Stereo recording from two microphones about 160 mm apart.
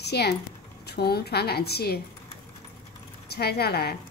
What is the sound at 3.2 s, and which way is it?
Speech, 80° left.